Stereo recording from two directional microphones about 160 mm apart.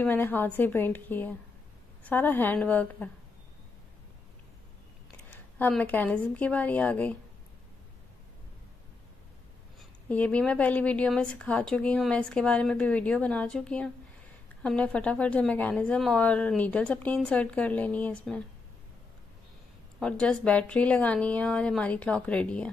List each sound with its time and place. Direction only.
0.0 s a woman's voice: 10° left (ahead or behind)
5.6 s a woman's voice: 10° left (ahead or behind)
9.8 s a woman's voice: 10° left (ahead or behind)
20.0 s a woman's voice: 5° left (ahead or behind)